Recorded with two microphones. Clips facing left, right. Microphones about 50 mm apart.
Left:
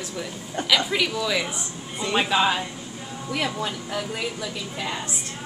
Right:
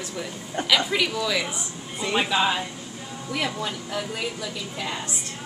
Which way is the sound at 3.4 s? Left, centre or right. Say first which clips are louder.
Left 1 dB; left.